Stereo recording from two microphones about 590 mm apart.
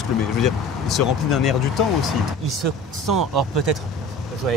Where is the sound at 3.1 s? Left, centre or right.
Right.